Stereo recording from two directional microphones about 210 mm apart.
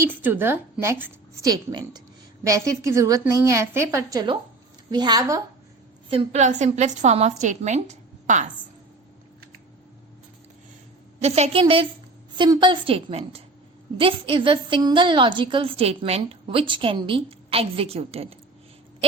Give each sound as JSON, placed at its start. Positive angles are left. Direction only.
{"t": 0.0, "sound": "a woman's voice", "side_deg": -10}
{"t": 6.1, "sound": "a woman's voice", "side_deg": -30}
{"t": 11.2, "sound": "a woman's voice", "side_deg": -30}